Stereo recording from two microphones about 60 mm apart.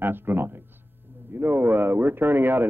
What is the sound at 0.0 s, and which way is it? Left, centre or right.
Speech, right.